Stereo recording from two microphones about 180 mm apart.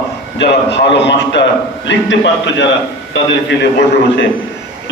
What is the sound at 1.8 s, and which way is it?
Speech, 85° left.